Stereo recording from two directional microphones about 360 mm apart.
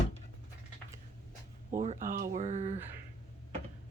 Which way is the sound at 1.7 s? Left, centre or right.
Centre.